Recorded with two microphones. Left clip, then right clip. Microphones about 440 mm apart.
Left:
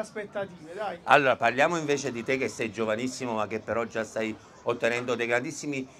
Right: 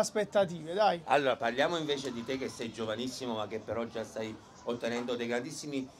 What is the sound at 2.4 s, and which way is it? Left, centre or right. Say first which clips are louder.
Speech: left 8 dB; left.